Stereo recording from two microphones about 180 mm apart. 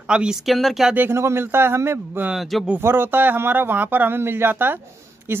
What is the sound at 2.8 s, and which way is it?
A man's voice, 10° right (ahead or behind).